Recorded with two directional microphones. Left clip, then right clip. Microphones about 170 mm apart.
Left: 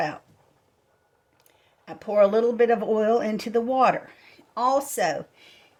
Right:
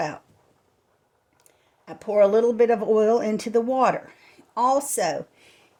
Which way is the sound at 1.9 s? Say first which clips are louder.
Right 1 dB; 35° right (ahead or behind).